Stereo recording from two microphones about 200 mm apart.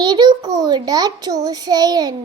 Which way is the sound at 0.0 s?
20° right (ahead or behind).